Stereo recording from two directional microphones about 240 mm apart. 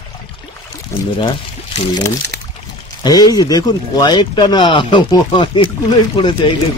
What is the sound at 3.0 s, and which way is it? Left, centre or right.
Speech, centre.